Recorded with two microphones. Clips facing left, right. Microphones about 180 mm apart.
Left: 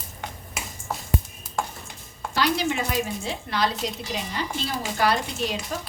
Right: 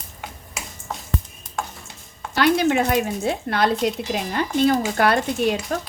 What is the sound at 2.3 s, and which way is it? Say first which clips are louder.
Speech: right 6 dB; 60° right (ahead or behind).